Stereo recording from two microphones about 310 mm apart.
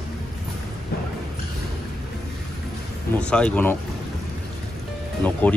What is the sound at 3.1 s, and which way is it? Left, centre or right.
Speech, centre.